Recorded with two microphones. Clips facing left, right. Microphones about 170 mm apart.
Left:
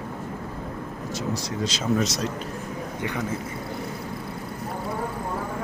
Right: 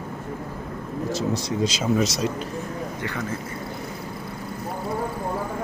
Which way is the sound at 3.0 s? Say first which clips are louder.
Left 3 dB; 15° left (ahead or behind).